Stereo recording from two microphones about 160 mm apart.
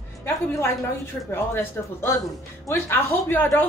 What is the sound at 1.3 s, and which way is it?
A woman's voice, 15° left (ahead or behind).